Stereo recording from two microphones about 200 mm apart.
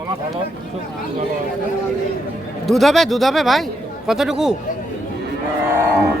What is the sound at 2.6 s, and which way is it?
Speech, centre (ahead or behind).